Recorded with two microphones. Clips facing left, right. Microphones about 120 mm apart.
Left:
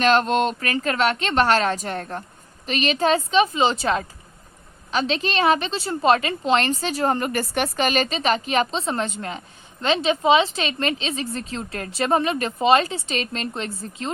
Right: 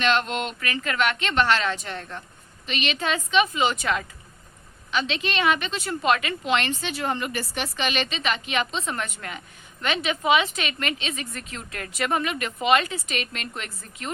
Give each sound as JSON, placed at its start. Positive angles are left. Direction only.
{"t": 0.0, "sound": "a woman's voice", "side_deg": 40}